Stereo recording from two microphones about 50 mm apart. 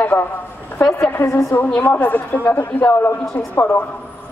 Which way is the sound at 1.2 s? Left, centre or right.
Left.